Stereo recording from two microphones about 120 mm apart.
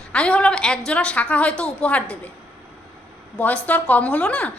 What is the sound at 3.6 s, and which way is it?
Speech, 10° left (ahead or behind).